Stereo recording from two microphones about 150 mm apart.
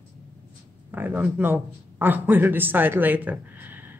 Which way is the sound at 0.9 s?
10° right (ahead or behind).